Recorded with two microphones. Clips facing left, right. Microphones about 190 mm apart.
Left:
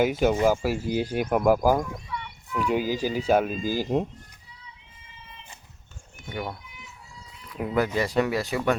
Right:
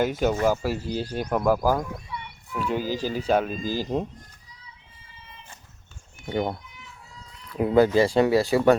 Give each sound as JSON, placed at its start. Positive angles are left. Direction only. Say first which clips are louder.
{"t": 0.0, "sound": "speech", "louder": "left 1 dB", "side_deg": 10}
{"t": 6.2, "sound": "speech", "louder": "right 7 dB", "side_deg": -25}
{"t": 7.6, "sound": "speech", "louder": "right 7 dB", "side_deg": -30}